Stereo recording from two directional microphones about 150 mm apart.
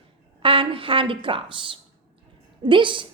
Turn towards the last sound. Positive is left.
turn(degrees=-35)  # may be behind; listen again after turning